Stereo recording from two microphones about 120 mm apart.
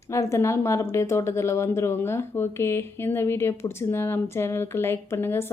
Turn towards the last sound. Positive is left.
turn(degrees=20)  # may be behind; listen again after turning